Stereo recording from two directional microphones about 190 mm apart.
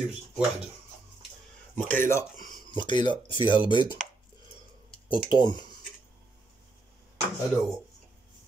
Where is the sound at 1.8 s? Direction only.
10° left (ahead or behind).